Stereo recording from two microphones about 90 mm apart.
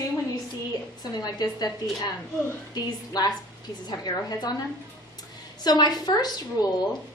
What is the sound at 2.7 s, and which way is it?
A woman's voice, 45° left (ahead or behind).